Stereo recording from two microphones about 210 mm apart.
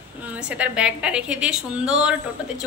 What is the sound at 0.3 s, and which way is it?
Speech, 5° right (ahead or behind).